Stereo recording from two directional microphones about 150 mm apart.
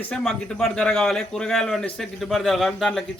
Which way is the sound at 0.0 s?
5° left (ahead or behind).